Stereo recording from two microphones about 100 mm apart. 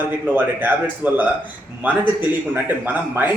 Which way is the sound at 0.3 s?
20° right (ahead or behind).